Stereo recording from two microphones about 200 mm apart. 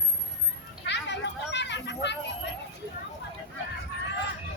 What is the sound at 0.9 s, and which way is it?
Children playing, 60° left (ahead or behind).